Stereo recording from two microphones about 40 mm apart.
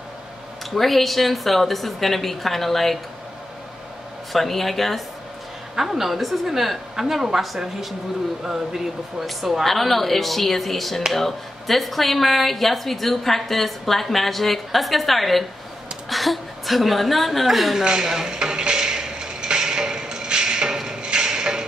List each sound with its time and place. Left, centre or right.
0.7 s speech: centre
4.3 s speech: centre
5.8 s a woman's voice: centre
17.8 s a sound: centre